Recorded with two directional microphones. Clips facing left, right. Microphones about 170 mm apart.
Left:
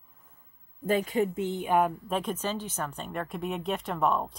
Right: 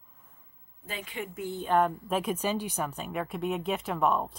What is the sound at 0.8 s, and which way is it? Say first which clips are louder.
Speech: left 12 dB; 45° left (ahead or behind).